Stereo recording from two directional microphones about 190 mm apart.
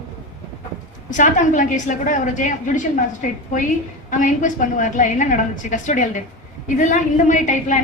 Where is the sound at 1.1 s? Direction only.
40° left (ahead or behind).